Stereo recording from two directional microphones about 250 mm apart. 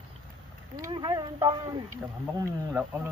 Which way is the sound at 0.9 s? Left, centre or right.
Centre.